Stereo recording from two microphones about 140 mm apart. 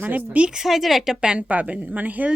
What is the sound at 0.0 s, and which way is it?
A woman's voice, 10° right (ahead or behind).